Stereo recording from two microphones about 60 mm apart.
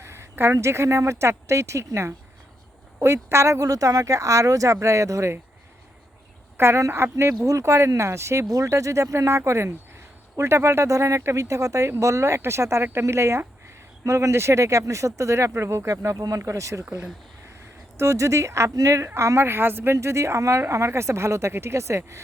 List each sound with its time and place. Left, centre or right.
0.0 s a woman's voice: right
6.6 s speech: right
7.4 s speech: right
17.9 s speech: right
18.7 s speech: right